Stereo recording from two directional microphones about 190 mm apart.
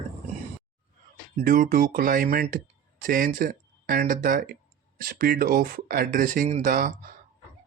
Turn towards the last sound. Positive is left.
turn(degrees=-45)  # may be behind; listen again after turning